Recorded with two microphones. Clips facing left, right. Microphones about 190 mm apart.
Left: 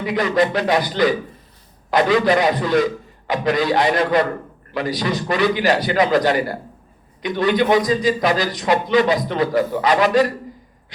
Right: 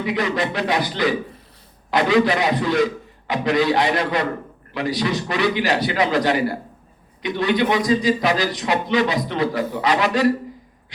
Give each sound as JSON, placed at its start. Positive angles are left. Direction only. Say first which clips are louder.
{"t": 0.1, "sound": "a man's voice", "louder": "left 6 dB", "side_deg": 45}